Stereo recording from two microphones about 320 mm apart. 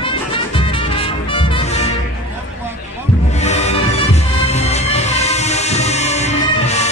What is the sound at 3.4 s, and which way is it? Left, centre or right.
Music, left.